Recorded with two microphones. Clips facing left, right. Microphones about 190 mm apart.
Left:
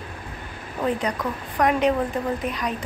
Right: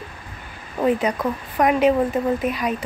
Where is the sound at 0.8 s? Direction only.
25° right (ahead or behind).